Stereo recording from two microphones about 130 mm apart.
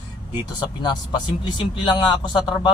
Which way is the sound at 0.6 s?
35° left (ahead or behind).